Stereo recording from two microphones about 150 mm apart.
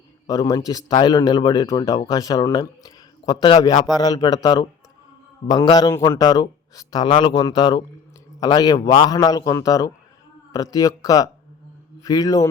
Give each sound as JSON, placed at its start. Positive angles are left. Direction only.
{"t": 0.3, "sound": "a man's voice", "side_deg": 25}